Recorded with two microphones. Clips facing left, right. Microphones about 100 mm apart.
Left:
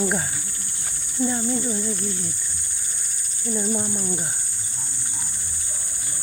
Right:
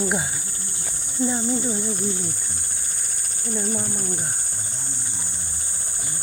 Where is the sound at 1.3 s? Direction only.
20° right (ahead or behind).